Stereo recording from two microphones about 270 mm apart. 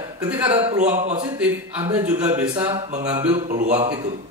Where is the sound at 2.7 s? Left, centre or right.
Right.